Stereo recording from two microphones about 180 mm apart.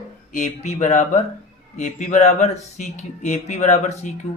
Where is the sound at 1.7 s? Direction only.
40° left (ahead or behind).